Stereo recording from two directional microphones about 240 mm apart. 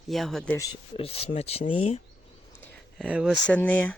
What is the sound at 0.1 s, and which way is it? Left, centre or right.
Speech, centre.